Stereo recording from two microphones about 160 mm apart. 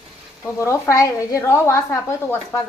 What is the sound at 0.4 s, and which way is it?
A woman's voice, 15° left (ahead or behind).